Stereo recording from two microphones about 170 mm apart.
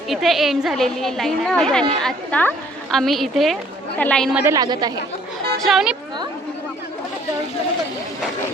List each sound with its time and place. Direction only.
0.1 s a woman's voice: centre (ahead or behind)
4.4 s a woman's voice: 20° right (ahead or behind)
5.5 s a woman's voice: centre (ahead or behind)